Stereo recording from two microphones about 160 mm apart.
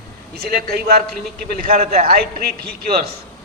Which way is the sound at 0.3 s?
80° right.